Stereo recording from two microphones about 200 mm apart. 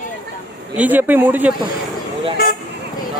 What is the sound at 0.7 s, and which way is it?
Speech, 10° right (ahead or behind).